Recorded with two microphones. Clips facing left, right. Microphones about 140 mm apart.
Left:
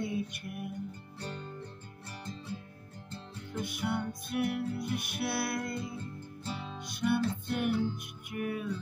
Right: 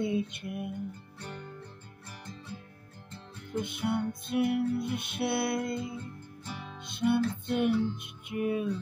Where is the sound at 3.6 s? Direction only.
20° right (ahead or behind).